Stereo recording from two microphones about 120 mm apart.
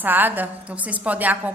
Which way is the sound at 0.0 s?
15° right (ahead or behind).